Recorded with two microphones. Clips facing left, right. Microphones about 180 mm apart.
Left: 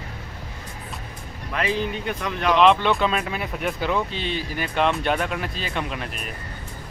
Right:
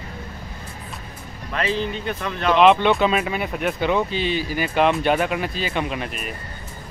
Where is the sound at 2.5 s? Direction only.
5° right (ahead or behind).